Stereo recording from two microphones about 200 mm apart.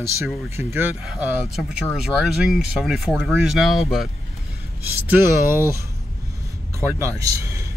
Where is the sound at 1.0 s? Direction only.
Centre (ahead or behind).